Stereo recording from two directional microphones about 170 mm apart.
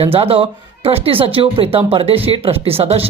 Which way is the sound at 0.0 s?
35° right (ahead or behind).